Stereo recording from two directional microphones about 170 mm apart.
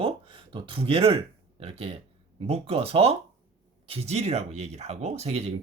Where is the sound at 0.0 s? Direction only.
30° right (ahead or behind).